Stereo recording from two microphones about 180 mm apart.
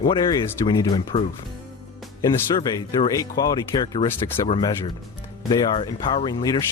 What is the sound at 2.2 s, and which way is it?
Speech, 25° left (ahead or behind).